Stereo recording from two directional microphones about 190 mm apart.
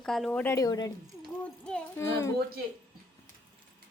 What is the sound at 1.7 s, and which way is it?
Speech, 10° left (ahead or behind).